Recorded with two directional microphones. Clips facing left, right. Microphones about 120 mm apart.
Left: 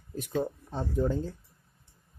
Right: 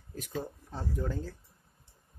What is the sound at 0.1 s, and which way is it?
Speech, 20° left (ahead or behind).